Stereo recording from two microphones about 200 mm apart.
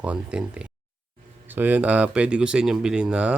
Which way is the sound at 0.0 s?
5° right (ahead or behind).